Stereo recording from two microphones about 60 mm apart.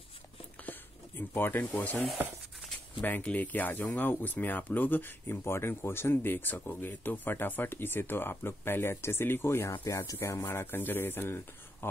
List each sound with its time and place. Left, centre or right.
1.3 s speech: left
10.4 s speech: left